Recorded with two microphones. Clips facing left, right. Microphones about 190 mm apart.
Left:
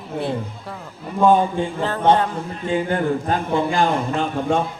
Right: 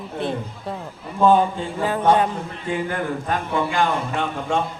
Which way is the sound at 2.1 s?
25° left (ahead or behind).